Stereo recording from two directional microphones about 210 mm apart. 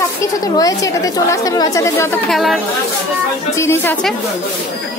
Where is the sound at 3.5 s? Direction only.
10° left (ahead or behind).